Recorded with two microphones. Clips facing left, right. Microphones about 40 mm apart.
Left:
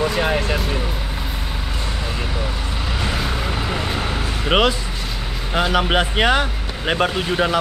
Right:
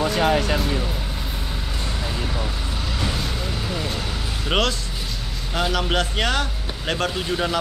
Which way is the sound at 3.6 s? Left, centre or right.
Left.